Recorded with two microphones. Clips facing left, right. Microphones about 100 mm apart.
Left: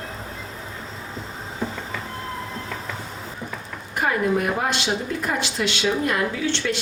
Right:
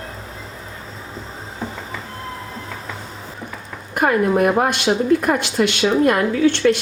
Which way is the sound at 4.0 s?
55° right (ahead or behind).